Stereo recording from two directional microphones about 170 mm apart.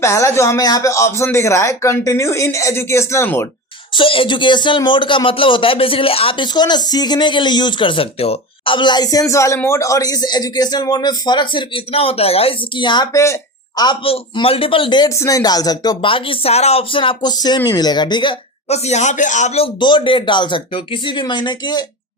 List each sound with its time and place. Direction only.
0.0 s speech: 15° left (ahead or behind)
3.9 s speech: 30° left (ahead or behind)